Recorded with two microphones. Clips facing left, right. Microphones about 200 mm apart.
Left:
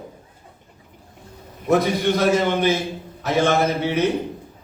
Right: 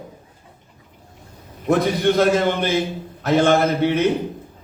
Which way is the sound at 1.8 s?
55° right (ahead or behind).